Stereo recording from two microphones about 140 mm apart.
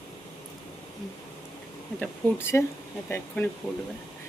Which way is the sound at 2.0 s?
15° left (ahead or behind).